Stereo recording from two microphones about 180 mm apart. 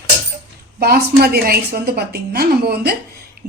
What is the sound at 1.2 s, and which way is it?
A woman's voice, 60° right (ahead or behind).